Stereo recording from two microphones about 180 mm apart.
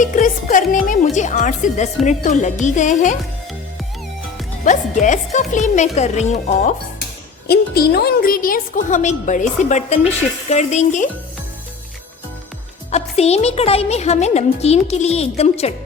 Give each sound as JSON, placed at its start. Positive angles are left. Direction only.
{"t": 0.0, "sound": "a woman's voice", "side_deg": 45}
{"t": 4.6, "sound": "a woman's voice", "side_deg": 45}
{"t": 7.4, "sound": "a woman's voice", "side_deg": 60}
{"t": 12.9, "sound": "a woman's voice", "side_deg": 35}